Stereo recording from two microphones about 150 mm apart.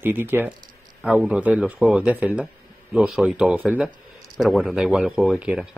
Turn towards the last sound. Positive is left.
turn(degrees=-5)  # may be behind; listen again after turning